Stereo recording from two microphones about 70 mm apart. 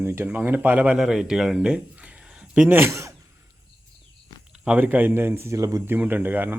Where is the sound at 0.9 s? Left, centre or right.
Centre.